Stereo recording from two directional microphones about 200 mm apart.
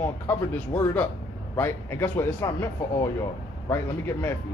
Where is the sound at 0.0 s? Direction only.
10° left (ahead or behind).